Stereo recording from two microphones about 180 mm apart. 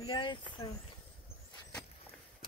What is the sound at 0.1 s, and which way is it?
Speech, 25° left (ahead or behind).